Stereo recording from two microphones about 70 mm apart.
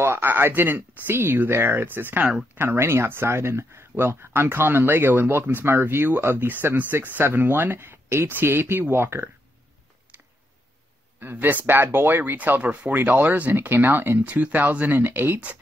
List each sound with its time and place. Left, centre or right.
0.0 s a sound: right
0.3 s speech: right
10.1 s tick: right
11.1 s speech: right